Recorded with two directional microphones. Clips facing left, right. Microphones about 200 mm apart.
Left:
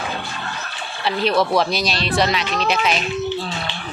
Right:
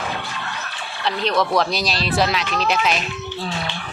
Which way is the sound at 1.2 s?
5° left (ahead or behind).